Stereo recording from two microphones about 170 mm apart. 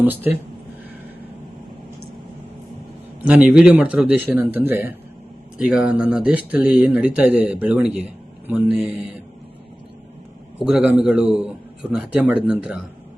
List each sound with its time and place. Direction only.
0.0 s speech: 10° right (ahead or behind)
3.2 s a man's voice: 5° right (ahead or behind)
10.7 s a man's voice: 5° right (ahead or behind)